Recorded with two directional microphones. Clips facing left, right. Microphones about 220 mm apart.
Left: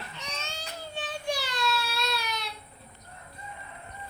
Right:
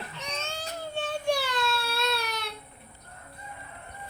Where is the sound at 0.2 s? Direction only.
55° right (ahead or behind).